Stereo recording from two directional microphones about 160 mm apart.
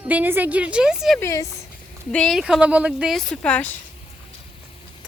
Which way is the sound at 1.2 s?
20° left (ahead or behind).